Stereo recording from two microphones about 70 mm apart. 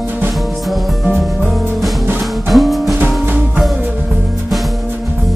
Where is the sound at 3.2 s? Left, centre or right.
Right.